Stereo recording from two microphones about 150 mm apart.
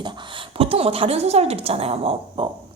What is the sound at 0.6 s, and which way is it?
A woman's voice, 40° right (ahead or behind).